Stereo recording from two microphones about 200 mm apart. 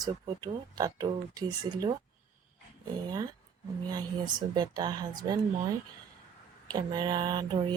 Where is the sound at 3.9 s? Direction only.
20° right (ahead or behind).